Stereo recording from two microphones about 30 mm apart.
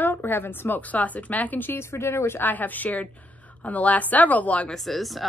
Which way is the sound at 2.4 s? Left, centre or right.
Left.